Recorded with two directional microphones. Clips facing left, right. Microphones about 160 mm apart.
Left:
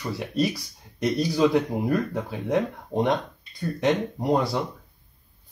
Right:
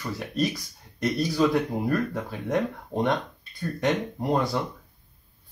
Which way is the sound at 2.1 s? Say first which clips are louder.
Left 2 dB; centre (ahead or behind).